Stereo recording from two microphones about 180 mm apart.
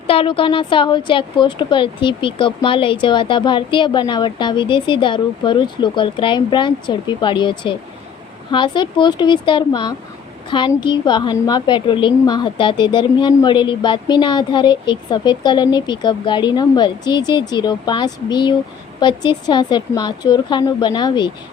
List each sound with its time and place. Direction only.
0.1 s a woman's voice: 30° left (ahead or behind)